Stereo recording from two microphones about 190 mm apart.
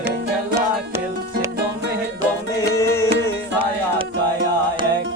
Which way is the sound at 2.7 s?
15° left (ahead or behind).